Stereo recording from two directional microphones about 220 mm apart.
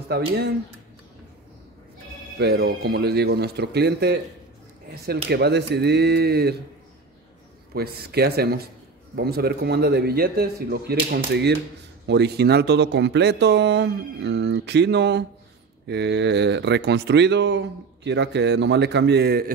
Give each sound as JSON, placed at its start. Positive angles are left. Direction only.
{"t": 0.1, "sound": "speech", "side_deg": -45}
{"t": 2.3, "sound": "speech", "side_deg": -45}
{"t": 7.7, "sound": "speech", "side_deg": -45}